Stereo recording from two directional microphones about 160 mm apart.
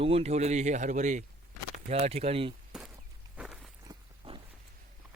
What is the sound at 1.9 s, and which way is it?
Speech, 40° right (ahead or behind).